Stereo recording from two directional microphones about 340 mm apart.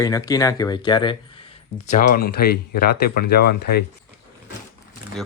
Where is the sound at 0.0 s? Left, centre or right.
Centre.